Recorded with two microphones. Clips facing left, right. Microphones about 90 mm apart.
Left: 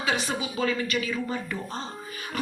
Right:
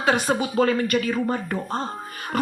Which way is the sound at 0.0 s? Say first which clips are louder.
Right 7 dB; 50° right (ahead or behind).